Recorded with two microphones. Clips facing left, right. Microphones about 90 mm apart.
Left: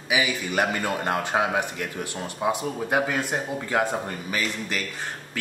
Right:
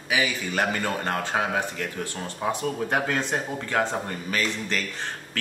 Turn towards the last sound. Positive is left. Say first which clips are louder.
# right 1 dB
turn(degrees=10)  # may be behind; listen again after turning